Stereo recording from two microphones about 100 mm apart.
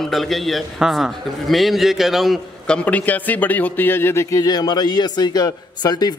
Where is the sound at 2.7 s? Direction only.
15° left (ahead or behind).